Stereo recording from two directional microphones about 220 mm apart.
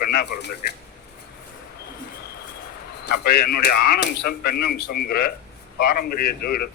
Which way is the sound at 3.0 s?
45° left (ahead or behind).